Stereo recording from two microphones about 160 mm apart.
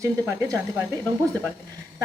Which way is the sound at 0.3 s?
20° right (ahead or behind).